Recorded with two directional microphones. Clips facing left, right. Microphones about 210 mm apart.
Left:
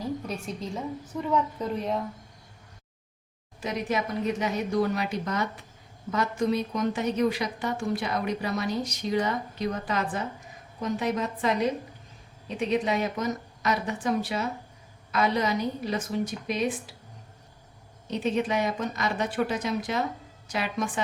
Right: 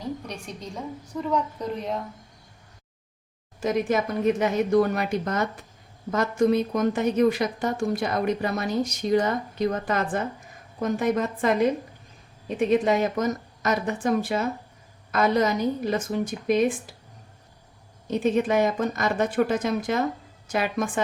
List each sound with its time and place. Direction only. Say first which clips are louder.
0.0 s a woman's voice: left 1 dB; 5° left (ahead or behind)
3.6 s a woman's voice: right 5 dB; 45° right (ahead or behind)
18.1 s a woman's voice: right 5 dB; 50° right (ahead or behind)